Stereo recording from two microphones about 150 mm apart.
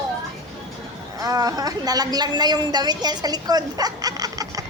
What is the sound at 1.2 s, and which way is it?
A woman's voice, 25° right (ahead or behind).